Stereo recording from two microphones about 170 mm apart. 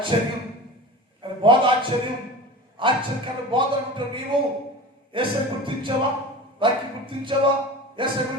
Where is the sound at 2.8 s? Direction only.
30° right (ahead or behind).